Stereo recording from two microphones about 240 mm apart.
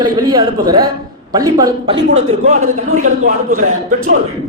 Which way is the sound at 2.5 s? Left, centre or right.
Right.